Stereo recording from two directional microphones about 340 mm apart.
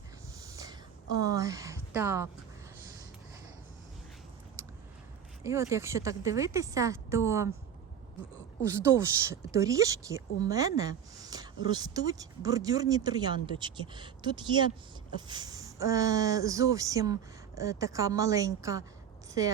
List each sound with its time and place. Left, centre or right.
0.4 s a sound: centre
1.2 s a woman's voice: centre
5.4 s speech: centre
8.7 s speech: centre